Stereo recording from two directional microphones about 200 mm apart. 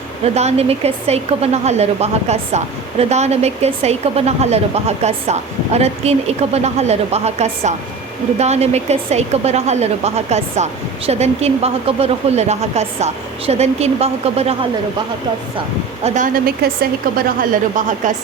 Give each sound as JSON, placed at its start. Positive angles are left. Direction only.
{"t": 0.3, "sound": "a woman's voice", "side_deg": -30}
{"t": 16.0, "sound": "a woman's voice", "side_deg": -40}